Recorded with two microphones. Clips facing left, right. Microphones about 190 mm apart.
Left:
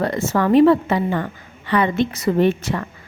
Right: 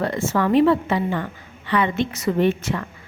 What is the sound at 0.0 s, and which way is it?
A woman's voice, 40° left (ahead or behind).